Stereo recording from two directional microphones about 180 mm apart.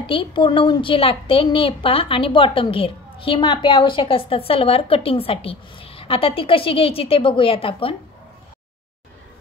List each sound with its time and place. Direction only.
0.0 s a woman's voice: 30° left (ahead or behind)